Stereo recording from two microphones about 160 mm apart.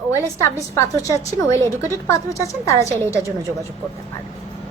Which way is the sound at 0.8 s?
20° left (ahead or behind).